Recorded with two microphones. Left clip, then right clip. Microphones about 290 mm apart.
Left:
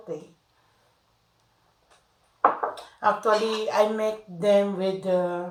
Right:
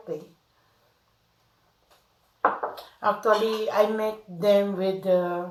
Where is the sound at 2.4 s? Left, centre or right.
Centre.